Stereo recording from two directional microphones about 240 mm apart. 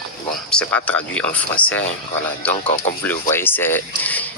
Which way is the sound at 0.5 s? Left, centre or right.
Centre.